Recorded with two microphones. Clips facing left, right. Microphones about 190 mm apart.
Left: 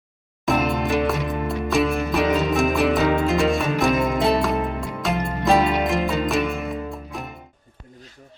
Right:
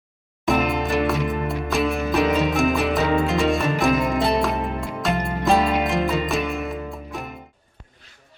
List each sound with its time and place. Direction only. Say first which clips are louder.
0.4 s music: even; centre (ahead or behind)